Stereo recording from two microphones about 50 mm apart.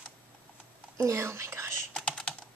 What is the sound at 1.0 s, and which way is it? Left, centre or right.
Speech, right.